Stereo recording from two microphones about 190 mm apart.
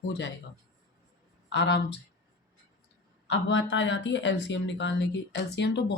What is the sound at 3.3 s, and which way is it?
Speech, 75° left (ahead or behind).